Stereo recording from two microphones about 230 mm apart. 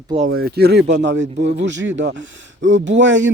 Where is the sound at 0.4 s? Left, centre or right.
Right.